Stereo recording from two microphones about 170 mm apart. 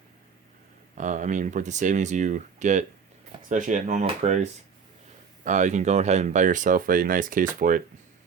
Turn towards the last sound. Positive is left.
turn(degrees=-50)  # may be behind; listen again after turning